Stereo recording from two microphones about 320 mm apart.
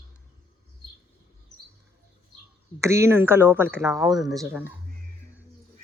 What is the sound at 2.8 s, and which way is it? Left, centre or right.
Speech, centre.